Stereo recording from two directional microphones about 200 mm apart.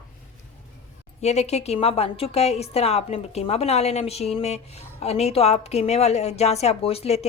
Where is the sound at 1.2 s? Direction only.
35° left (ahead or behind).